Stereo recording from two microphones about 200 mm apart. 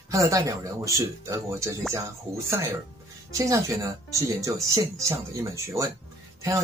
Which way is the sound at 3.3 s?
15° right (ahead or behind).